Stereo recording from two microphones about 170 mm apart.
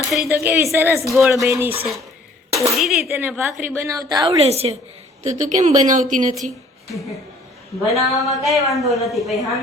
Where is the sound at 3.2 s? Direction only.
10° right (ahead or behind).